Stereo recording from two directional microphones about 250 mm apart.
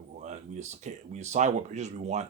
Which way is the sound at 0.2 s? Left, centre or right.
Right.